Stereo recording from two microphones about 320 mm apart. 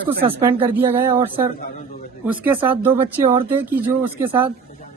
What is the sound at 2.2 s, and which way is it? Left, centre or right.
Speech, centre.